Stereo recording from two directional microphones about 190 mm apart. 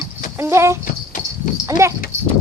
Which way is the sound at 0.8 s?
45° left (ahead or behind).